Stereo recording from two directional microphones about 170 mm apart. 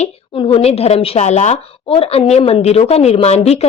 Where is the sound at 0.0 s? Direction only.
35° left (ahead or behind).